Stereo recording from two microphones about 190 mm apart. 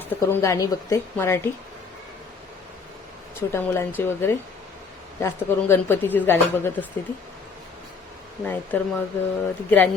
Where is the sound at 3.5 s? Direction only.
10° left (ahead or behind).